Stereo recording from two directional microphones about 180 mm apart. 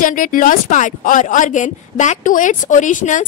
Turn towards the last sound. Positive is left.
turn(degrees=45)  # may be behind; listen again after turning